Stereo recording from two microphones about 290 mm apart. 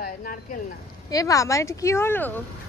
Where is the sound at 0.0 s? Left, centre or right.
Left.